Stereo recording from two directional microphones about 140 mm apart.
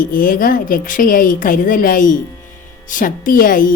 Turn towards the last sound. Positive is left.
turn(degrees=80)